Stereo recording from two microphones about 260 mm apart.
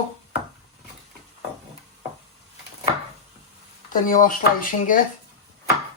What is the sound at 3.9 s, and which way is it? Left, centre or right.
Speech, left.